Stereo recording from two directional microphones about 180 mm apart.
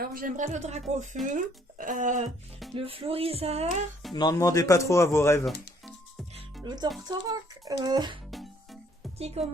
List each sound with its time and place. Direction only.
0.0 s speech: 50° right (ahead or behind)
2.7 s speech: 30° right (ahead or behind)
4.1 s speech: 20° left (ahead or behind)
6.6 s a child's voice: 25° right (ahead or behind)
8.3 s music: centre (ahead or behind)
9.1 s speech: 35° right (ahead or behind)